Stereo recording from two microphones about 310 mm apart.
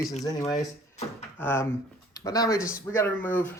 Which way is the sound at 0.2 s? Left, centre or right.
Centre.